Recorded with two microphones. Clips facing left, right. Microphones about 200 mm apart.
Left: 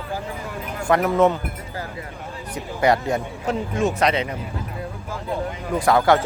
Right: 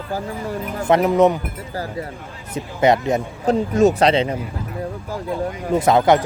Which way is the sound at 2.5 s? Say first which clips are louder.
Right 3 dB; 20° right (ahead or behind).